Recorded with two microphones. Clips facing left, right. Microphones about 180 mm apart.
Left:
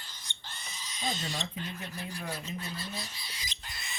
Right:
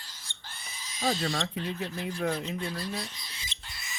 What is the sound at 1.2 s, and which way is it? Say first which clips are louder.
Speech: right 6 dB; 75° right (ahead or behind).